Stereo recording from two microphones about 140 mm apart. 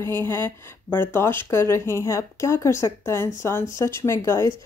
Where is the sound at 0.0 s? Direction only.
15° left (ahead or behind).